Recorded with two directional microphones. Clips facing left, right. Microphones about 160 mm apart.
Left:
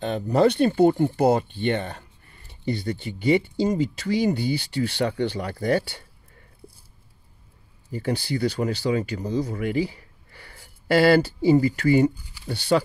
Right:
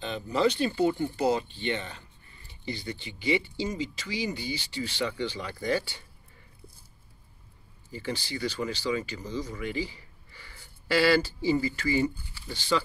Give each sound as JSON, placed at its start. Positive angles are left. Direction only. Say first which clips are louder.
{"t": 0.0, "sound": "speech", "louder": "left 7 dB", "side_deg": 50}
{"t": 4.1, "sound": "speech", "louder": "left 11 dB", "side_deg": 55}
{"t": 7.9, "sound": "speech", "louder": "left 8 dB", "side_deg": 55}